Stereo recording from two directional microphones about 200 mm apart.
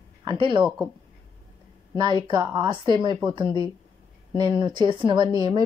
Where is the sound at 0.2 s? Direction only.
25° right (ahead or behind).